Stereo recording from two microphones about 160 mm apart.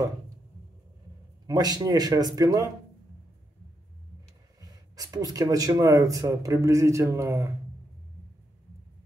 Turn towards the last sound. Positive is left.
turn(degrees=-20)  # may be behind; listen again after turning